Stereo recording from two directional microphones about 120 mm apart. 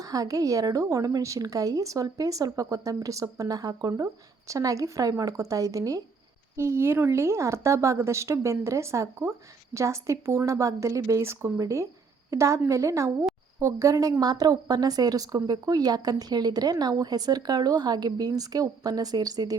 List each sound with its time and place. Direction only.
0.0 s a woman's voice: 30° right (ahead or behind)